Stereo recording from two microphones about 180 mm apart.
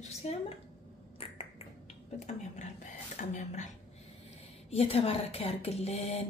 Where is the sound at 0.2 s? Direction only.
35° left (ahead or behind).